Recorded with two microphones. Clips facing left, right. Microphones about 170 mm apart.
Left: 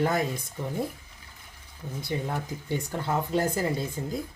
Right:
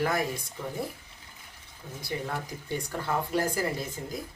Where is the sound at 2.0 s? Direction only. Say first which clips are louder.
Left 3 dB; 20° left (ahead or behind).